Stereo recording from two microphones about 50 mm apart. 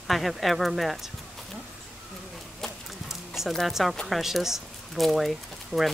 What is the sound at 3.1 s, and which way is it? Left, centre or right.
Music, centre.